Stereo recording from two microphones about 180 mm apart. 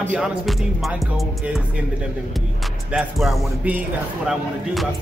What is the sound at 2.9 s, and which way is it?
Music, centre (ahead or behind).